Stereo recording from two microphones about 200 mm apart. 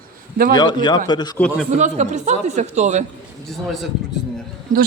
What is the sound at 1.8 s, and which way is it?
Speech, 35° right (ahead or behind).